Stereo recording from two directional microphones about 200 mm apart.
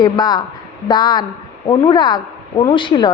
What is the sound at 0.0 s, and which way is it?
A woman's voice, 20° left (ahead or behind).